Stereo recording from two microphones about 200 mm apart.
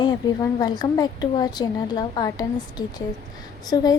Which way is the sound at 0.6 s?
20° left (ahead or behind).